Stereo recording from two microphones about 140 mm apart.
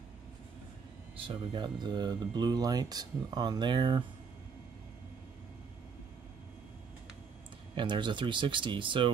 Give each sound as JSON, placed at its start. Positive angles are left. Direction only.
{"t": 1.1, "sound": "speech", "side_deg": -40}
{"t": 7.7, "sound": "speech", "side_deg": -35}